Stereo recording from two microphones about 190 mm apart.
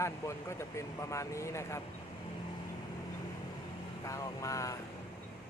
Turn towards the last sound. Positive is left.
turn(degrees=15)  # may be behind; listen again after turning